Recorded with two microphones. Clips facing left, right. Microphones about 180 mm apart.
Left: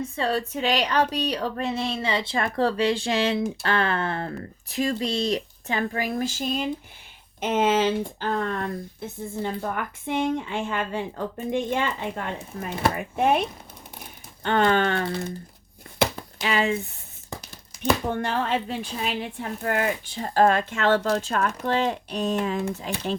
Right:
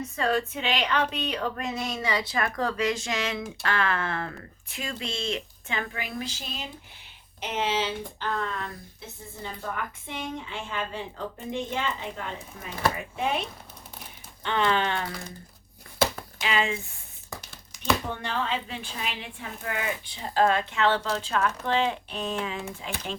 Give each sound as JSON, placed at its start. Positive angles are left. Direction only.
{"t": 0.2, "sound": "female singing", "side_deg": 35}
{"t": 7.4, "sound": "a woman's voice", "side_deg": 50}
{"t": 15.0, "sound": "typing", "side_deg": 25}
{"t": 16.4, "sound": "female singing", "side_deg": 40}
{"t": 18.1, "sound": "a woman's voice", "side_deg": 50}